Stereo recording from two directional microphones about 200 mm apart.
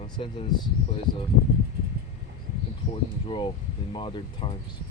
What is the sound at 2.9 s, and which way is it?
Speech, 25° left (ahead or behind).